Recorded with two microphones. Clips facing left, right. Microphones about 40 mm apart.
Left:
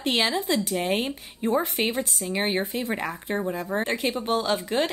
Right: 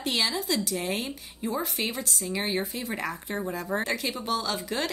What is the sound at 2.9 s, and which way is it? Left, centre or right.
Speech, centre.